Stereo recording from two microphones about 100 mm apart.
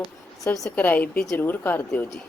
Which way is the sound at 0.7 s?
15° left (ahead or behind).